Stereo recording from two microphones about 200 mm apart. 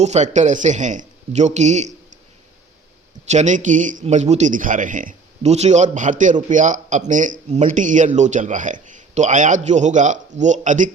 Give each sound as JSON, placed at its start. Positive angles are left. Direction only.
{"t": 0.0, "sound": "speech", "side_deg": -35}
{"t": 3.2, "sound": "speech", "side_deg": -35}